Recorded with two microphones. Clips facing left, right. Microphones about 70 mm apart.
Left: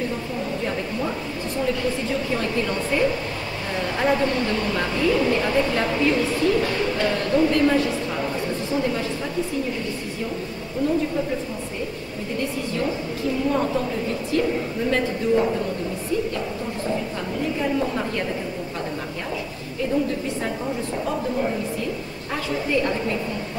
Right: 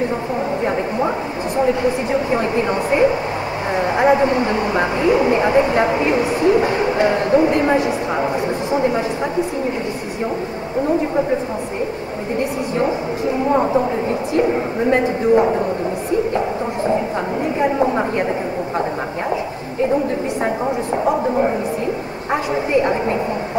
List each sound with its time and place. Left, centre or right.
0.7 s a sound: right
1.6 s a woman's voice: right
12.4 s a woman's voice: right
20.4 s a woman's voice: right